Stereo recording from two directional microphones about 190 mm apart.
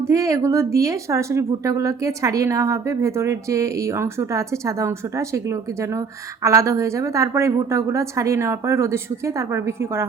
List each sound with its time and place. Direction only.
0.1 s speech: 15° right (ahead or behind)